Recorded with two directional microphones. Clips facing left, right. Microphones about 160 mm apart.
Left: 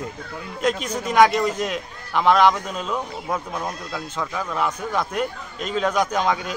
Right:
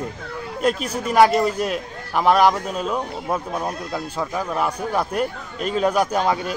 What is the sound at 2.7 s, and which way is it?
Speech, 5° right (ahead or behind).